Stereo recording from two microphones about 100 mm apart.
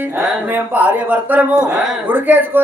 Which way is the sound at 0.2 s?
15° right (ahead or behind).